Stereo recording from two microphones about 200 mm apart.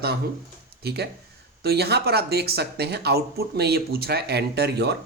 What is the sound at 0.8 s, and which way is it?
Speech, 55° right (ahead or behind).